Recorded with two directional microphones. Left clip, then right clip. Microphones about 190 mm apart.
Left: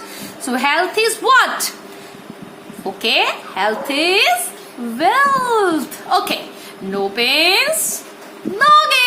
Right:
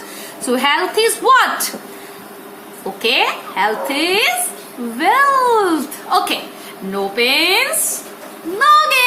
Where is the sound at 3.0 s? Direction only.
40° left (ahead or behind).